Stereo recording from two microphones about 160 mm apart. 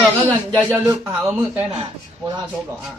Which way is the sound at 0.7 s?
15° right (ahead or behind).